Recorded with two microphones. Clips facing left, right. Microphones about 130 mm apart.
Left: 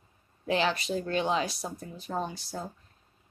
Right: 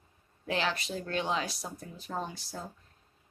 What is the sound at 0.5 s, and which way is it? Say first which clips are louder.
Speech: left 5 dB; 15° left (ahead or behind).